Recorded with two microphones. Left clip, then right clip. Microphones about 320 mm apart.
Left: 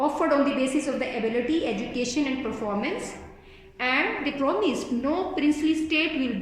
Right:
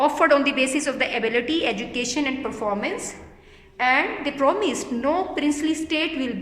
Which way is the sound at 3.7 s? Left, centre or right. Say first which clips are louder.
Right 4 dB; right.